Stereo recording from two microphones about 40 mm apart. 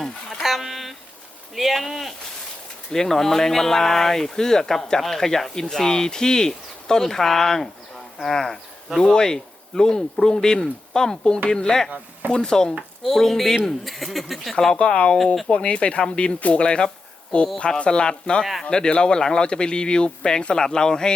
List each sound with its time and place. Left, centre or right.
0.6 s a sound: centre
1.5 s speech: centre
2.9 s a man's voice: centre
13.0 s speech: centre
14.5 s speech: centre
14.8 s a man's voice: left